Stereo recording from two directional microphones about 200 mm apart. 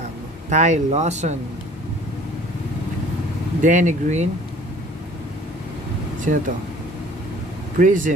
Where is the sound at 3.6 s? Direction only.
40° right (ahead or behind).